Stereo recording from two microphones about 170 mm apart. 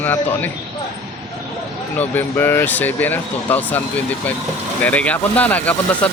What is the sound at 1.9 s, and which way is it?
Speech, 10° left (ahead or behind).